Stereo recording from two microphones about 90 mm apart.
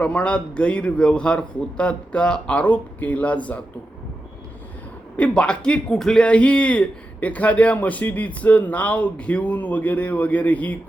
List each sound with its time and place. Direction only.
0.0 s speech: 15° left (ahead or behind)
5.1 s speech: 10° left (ahead or behind)